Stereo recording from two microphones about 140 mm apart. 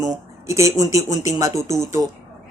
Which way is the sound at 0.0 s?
20° right (ahead or behind).